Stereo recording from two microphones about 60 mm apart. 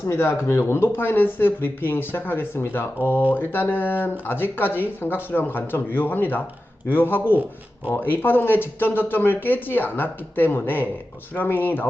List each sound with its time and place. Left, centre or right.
0.1 s speech: left